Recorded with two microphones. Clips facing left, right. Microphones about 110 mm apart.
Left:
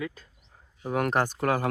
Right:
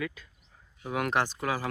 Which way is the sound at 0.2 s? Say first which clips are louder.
Left 1 dB; 35° left (ahead or behind).